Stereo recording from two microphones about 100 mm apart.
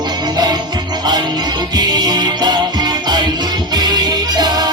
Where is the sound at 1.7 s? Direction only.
45° right (ahead or behind).